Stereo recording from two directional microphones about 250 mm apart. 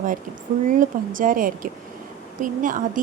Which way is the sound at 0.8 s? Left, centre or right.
Right.